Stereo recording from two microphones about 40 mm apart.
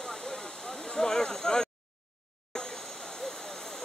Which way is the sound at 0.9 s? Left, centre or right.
Centre.